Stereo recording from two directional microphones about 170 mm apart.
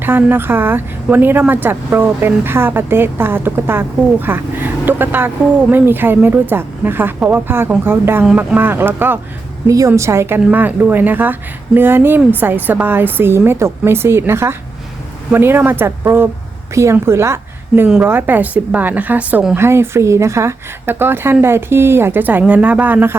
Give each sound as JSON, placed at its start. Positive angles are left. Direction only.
{"t": 0.0, "sound": "a woman's voice", "side_deg": -10}